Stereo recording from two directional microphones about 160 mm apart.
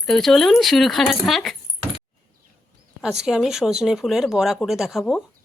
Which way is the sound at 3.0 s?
5° right (ahead or behind).